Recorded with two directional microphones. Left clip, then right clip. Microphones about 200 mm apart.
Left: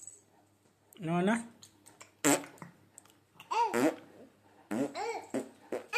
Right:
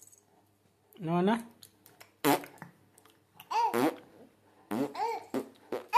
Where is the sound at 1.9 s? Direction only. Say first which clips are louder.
Right 2 dB; 15° right (ahead or behind).